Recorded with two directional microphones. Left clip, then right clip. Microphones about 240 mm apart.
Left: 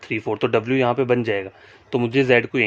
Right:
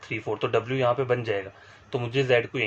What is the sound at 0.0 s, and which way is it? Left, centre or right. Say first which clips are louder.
Speech: left 6 dB; left.